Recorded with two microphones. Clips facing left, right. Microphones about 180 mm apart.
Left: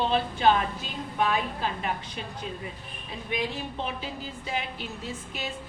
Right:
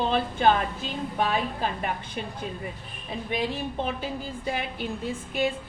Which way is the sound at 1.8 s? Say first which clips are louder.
Right 2 dB; 50° right (ahead or behind).